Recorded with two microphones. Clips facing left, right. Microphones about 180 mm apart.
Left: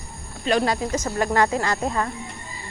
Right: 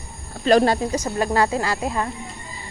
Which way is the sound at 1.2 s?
25° right (ahead or behind).